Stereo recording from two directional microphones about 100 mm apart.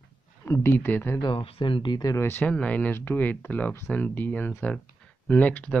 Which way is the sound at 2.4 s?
10° left (ahead or behind).